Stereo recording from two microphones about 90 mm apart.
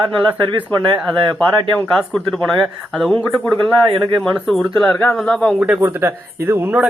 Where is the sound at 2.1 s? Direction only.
5° left (ahead or behind).